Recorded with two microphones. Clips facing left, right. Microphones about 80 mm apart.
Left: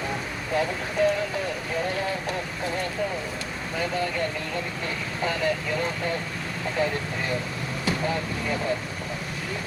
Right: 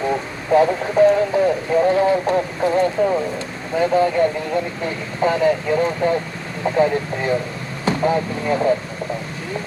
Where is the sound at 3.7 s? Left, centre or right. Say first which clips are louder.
Right 12 dB; right.